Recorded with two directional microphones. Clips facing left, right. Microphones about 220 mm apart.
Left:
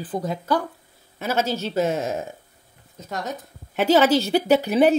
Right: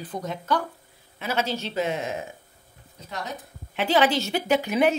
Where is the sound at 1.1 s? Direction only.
45° left (ahead or behind).